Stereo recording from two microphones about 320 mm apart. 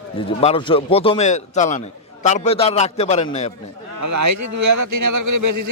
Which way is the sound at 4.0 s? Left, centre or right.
Right.